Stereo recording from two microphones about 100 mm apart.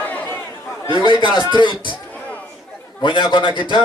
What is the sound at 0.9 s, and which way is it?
A man's voice, 55° left (ahead or behind).